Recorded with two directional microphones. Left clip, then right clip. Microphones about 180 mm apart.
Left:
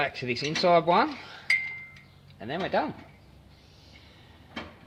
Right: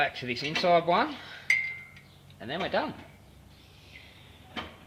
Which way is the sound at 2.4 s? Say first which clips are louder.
Left 2 dB; 35° left (ahead or behind).